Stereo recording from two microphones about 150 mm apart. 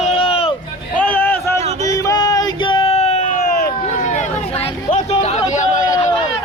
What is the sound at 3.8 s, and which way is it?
Vehicle, 50° left (ahead or behind).